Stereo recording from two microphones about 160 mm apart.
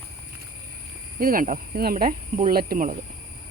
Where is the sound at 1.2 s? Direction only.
60° right (ahead or behind).